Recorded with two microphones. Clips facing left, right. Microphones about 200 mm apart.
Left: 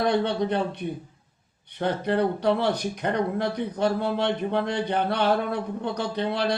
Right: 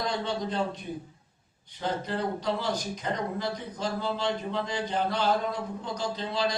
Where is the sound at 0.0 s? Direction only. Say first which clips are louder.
Left 7 dB; 65° left (ahead or behind).